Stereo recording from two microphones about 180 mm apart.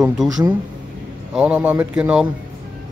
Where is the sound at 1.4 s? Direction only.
5° right (ahead or behind).